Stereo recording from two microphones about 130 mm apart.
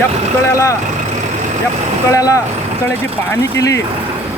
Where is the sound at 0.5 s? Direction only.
25° left (ahead or behind).